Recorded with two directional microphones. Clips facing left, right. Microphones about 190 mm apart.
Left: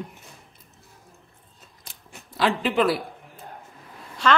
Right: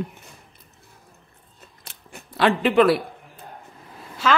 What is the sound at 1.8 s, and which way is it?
Scissors, 60° right (ahead or behind).